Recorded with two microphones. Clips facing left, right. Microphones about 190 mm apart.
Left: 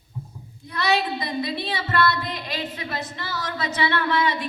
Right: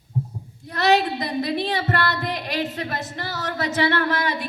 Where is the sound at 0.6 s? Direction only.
45° right (ahead or behind).